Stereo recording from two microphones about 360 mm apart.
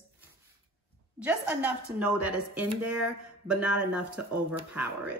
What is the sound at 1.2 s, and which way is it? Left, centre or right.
A woman's voice, centre.